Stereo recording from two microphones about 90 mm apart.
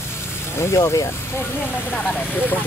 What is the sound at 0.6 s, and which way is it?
Speech, 35° left (ahead or behind).